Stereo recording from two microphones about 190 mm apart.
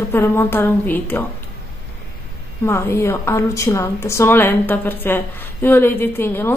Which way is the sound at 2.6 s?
15° left (ahead or behind).